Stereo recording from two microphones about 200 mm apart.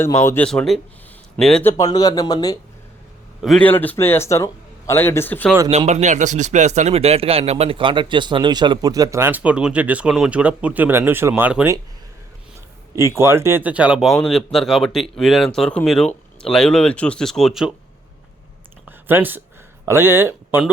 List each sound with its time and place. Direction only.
0.0 s a man's voice: 15° left (ahead or behind)
1.7 s speech: 20° left (ahead or behind)
3.4 s a man's voice: 5° left (ahead or behind)
5.7 s speech: 35° right (ahead or behind); by 11.8 s 10° right (ahead or behind)
13.0 s speech: 15° right (ahead or behind)
18.9 s a sound: 10° right (ahead or behind)
19.8 s speech: 10° right (ahead or behind)